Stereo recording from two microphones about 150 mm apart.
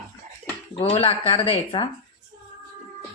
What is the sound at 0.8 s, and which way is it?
Speech, 40° left (ahead or behind).